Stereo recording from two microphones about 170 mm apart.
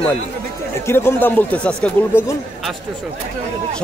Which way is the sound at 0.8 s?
15° left (ahead or behind).